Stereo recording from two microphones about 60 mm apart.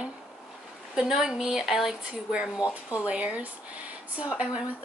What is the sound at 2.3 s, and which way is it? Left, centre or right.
Speech, centre.